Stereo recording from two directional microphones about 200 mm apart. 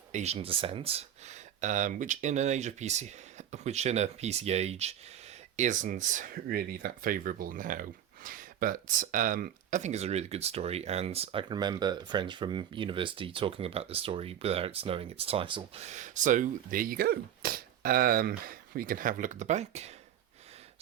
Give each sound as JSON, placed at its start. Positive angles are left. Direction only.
{"t": 0.1, "sound": "speech", "side_deg": -35}